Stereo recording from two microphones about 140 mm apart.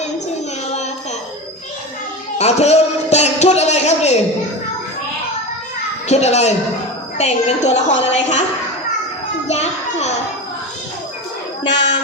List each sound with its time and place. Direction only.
2.4 s a sound: 50° left (ahead or behind)
6.1 s a woman's voice: 50° left (ahead or behind)
9.5 s a woman's voice: 50° left (ahead or behind)